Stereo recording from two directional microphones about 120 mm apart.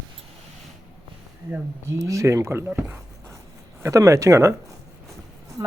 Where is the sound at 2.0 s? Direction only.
25° right (ahead or behind).